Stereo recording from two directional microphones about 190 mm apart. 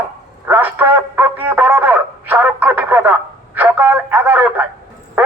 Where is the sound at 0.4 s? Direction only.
10° right (ahead or behind).